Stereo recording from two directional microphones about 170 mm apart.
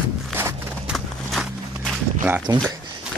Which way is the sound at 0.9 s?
Centre (ahead or behind).